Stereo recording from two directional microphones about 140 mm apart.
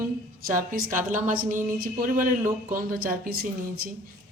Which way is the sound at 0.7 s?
70° right (ahead or behind).